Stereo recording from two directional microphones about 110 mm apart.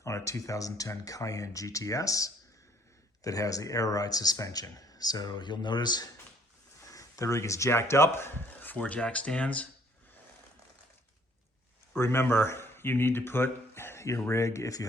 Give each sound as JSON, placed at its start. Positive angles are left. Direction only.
{"t": 0.0, "sound": "speech", "side_deg": 30}
{"t": 11.9, "sound": "speech", "side_deg": 25}